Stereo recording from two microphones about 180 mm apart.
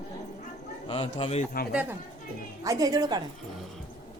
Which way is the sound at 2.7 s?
20° right (ahead or behind).